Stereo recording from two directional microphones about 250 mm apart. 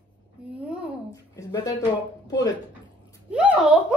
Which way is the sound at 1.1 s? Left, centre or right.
Centre.